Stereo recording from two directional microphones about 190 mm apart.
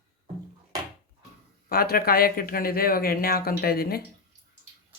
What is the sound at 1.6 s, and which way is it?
Speech, 55° left (ahead or behind).